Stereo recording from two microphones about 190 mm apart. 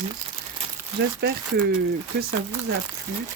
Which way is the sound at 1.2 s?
60° right (ahead or behind).